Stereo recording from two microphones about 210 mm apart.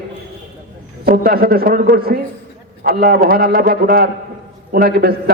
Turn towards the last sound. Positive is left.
turn(degrees=-45)  # may be behind; listen again after turning